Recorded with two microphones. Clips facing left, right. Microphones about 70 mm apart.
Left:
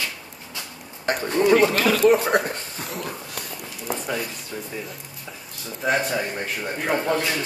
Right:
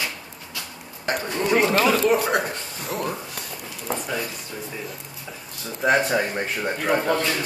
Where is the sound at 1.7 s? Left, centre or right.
Right.